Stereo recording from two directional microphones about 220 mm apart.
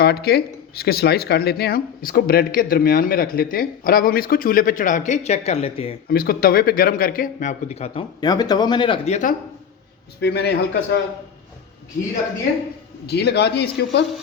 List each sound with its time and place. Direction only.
0.0 s speech: 45° left (ahead or behind); by 6.0 s 25° left (ahead or behind)
6.1 s speech: 45° left (ahead or behind)
10.2 s a man's voice: 50° left (ahead or behind)
13.1 s a man's voice: 50° left (ahead or behind)